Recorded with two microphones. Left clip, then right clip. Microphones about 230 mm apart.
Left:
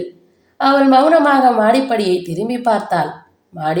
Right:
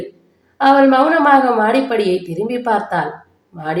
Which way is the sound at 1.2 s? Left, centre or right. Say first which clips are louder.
Even; left.